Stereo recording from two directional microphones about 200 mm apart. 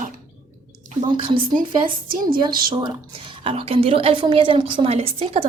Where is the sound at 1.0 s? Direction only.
25° right (ahead or behind).